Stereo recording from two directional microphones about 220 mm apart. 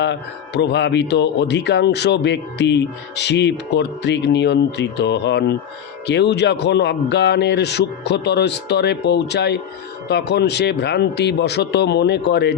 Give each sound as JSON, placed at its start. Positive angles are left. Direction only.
{"t": 0.0, "sound": "speech", "side_deg": 50}